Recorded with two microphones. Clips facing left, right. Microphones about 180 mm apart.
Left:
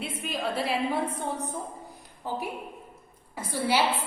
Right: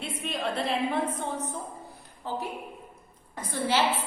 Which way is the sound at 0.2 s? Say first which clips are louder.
Even; centre (ahead or behind).